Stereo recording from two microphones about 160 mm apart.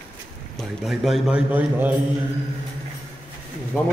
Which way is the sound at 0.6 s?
Centre (ahead or behind).